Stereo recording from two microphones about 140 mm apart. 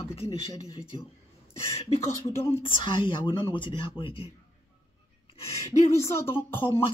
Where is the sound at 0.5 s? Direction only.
30° left (ahead or behind).